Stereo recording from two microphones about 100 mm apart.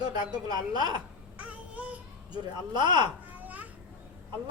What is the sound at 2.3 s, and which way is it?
Speech, 45° right (ahead or behind).